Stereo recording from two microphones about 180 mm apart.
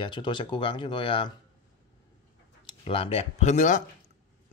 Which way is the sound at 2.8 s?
30° left (ahead or behind).